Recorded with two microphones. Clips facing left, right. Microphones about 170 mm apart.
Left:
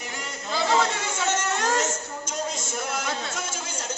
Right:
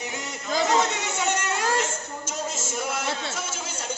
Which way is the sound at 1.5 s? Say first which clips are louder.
Left 1 dB; 10° right (ahead or behind).